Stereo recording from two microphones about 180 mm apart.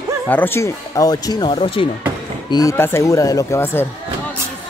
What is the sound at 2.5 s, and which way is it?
Speech, 15° left (ahead or behind).